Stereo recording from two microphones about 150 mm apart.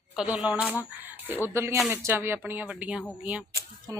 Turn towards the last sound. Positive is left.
turn(degrees=-20)  # may be behind; listen again after turning